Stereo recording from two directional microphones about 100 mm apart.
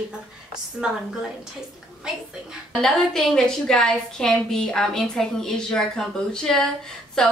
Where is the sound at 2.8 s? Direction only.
5° left (ahead or behind).